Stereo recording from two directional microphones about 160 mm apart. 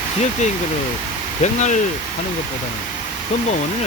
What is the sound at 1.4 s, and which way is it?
Speech, 45° left (ahead or behind).